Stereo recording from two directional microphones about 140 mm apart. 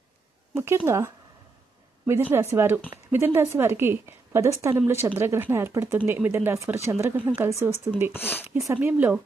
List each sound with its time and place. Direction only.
0.6 s a woman's voice: 20° right (ahead or behind)
8.1 s speech: 15° left (ahead or behind)
8.7 s a woman's voice: 10° right (ahead or behind)